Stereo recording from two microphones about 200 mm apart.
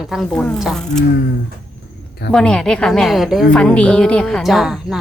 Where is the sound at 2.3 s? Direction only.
5° left (ahead or behind).